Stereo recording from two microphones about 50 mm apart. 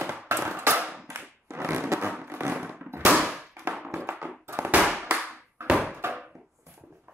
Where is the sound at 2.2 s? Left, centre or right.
Right.